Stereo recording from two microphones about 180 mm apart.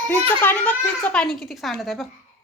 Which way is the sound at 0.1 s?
10° left (ahead or behind).